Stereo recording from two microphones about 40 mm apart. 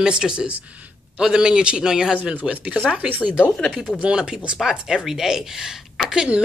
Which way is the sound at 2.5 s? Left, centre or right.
Right.